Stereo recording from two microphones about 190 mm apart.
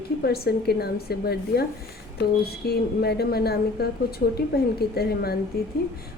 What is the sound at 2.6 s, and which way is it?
A woman's voice, 55° left (ahead or behind).